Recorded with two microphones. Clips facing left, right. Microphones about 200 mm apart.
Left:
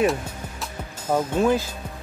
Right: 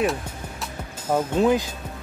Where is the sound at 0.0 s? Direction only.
Centre (ahead or behind).